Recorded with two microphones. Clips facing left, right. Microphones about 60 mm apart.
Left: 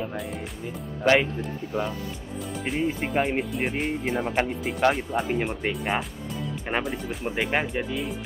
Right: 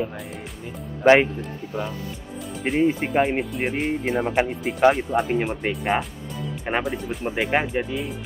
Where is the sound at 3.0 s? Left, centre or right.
Centre.